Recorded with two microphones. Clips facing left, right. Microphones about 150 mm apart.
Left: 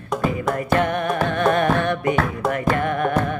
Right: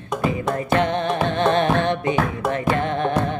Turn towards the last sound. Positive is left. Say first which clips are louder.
# even
turn(degrees=-25)  # may be behind; listen again after turning